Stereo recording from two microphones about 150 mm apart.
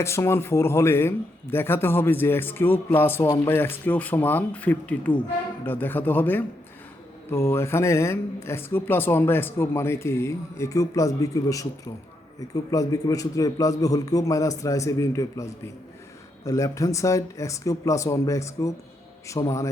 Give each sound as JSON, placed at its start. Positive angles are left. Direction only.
{"t": 0.0, "sound": "a man's voice", "side_deg": 20}